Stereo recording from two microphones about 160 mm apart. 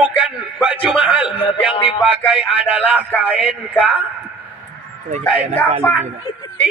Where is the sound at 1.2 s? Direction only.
35° left (ahead or behind).